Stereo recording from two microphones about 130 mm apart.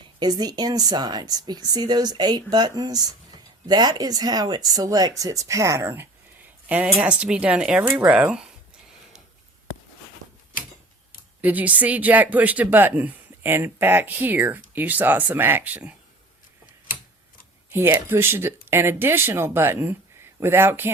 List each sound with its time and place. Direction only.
0.2 s speech: 30° right (ahead or behind); by 8.5 s 5° right (ahead or behind)
11.3 s speech: 10° right (ahead or behind)
17.7 s speech: 20° right (ahead or behind)